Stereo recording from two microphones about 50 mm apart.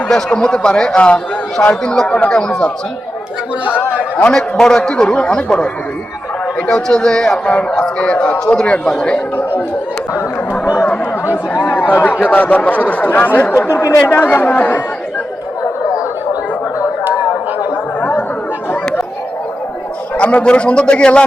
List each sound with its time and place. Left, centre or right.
0.3 s a man's voice: centre
4.3 s a man's voice: centre
6.7 s a man's voice: centre
11.7 s speech: left
18.0 s chatter: left
20.1 s a man's voice: left